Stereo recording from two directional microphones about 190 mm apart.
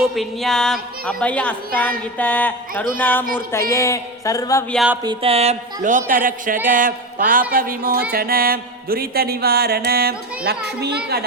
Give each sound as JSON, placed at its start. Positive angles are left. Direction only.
{"t": 0.0, "sound": "a woman's voice", "side_deg": 0}
{"t": 4.7, "sound": "speech", "side_deg": 0}
{"t": 5.0, "sound": "speech", "side_deg": -30}
{"t": 8.1, "sound": "music", "side_deg": -50}